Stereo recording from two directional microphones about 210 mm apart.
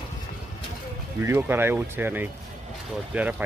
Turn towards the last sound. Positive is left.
turn(degrees=-5)  # may be behind; listen again after turning